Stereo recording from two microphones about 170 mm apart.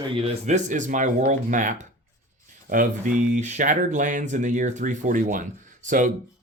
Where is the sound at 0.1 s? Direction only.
40° right (ahead or behind).